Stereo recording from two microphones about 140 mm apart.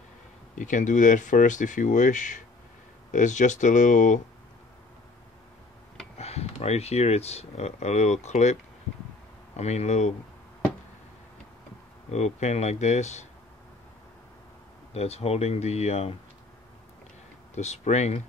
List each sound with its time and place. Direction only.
0.6 s speech: 65° left (ahead or behind)
6.1 s speech: 50° left (ahead or behind)
9.6 s speech: 55° left (ahead or behind)
12.1 s speech: 55° left (ahead or behind)
15.0 s speech: 50° left (ahead or behind)
17.6 s speech: 55° left (ahead or behind)